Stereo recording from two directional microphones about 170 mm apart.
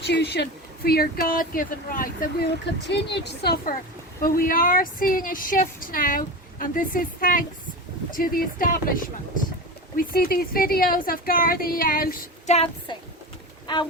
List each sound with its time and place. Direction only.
0.1 s a woman's voice: 75° left (ahead or behind)
0.9 s speech: 60° left (ahead or behind)
2.8 s a woman's voice: 90° left
4.2 s speech: 55° left (ahead or behind)
12.9 s speech: 25° left (ahead or behind)